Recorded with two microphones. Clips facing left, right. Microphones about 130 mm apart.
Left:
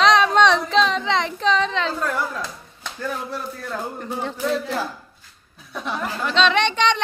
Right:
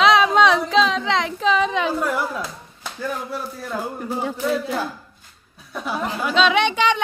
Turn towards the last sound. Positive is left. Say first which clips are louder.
# right 1 dB
turn(degrees=-5)  # may be behind; listen again after turning